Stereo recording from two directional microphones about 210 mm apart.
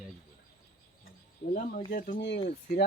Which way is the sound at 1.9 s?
40° left (ahead or behind).